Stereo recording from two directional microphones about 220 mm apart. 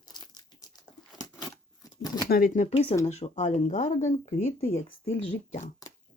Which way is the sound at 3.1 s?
30° left (ahead or behind).